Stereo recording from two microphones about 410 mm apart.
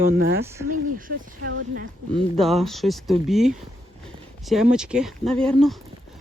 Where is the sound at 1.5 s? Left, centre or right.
Right.